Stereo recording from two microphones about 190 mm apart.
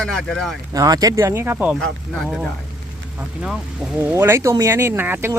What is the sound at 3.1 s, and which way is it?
Speech, 5° right (ahead or behind).